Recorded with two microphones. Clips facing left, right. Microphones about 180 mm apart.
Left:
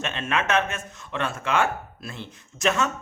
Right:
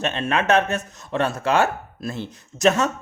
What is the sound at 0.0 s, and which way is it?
A man's voice, 35° right (ahead or behind).